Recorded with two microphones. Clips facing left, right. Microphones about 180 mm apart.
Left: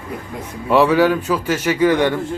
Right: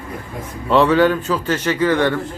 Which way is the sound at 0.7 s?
10° left (ahead or behind).